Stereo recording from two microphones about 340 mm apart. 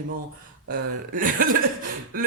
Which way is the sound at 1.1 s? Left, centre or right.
Right.